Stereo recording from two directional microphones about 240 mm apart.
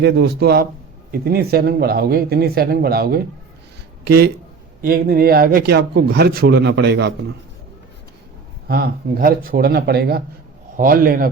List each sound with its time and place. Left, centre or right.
0.0 s a man's voice: right
4.8 s a man's voice: right
8.6 s a man's voice: right